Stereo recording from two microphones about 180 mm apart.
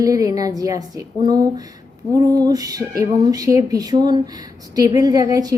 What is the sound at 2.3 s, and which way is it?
A woman's voice, 20° right (ahead or behind).